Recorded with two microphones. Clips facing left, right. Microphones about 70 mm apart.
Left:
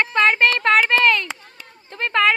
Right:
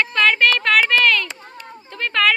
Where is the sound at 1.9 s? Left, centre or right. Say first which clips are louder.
Left 1 dB; left.